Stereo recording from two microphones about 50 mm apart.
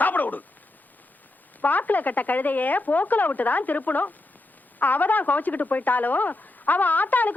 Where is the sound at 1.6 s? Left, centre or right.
Left.